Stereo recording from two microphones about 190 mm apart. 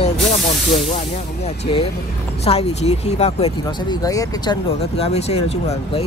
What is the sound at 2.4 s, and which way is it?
Speech, 35° left (ahead or behind).